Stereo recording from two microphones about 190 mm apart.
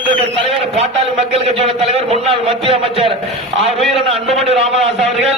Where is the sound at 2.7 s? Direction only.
30° right (ahead or behind).